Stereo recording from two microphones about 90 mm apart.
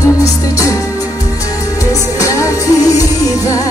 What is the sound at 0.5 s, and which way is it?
Music, 40° left (ahead or behind).